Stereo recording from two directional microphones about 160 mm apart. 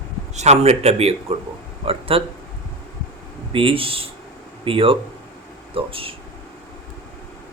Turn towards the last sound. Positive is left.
turn(degrees=-35)  # may be behind; listen again after turning